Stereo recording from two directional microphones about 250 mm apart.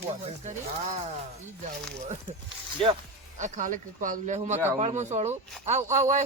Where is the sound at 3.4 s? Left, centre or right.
Right.